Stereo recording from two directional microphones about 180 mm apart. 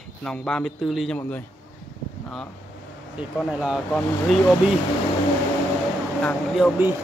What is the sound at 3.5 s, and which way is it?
Speech, 5° right (ahead or behind).